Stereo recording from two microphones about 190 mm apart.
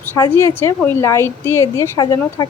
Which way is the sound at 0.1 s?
15° left (ahead or behind).